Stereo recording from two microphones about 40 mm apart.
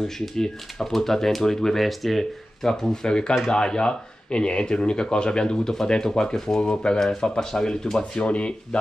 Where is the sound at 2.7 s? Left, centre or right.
Centre.